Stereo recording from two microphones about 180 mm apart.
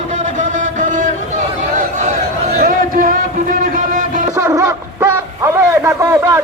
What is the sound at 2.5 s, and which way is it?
Music, 50° right (ahead or behind).